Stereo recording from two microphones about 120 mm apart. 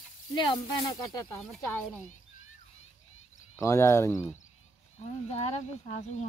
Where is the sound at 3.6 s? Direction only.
25° left (ahead or behind).